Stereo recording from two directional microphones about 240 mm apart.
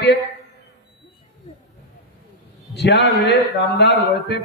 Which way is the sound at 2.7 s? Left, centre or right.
Left.